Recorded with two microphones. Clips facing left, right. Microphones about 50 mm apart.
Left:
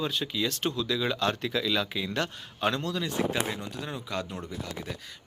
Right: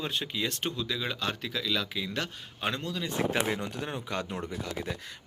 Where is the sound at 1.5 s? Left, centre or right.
Centre.